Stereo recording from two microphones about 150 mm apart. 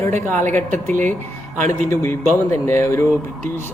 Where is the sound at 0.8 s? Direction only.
15° left (ahead or behind).